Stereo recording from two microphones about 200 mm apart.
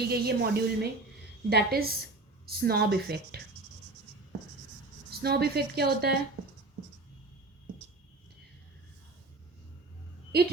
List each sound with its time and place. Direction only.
0.1 s a woman's voice: 55° right (ahead or behind)
5.2 s a woman's voice: 55° right (ahead or behind)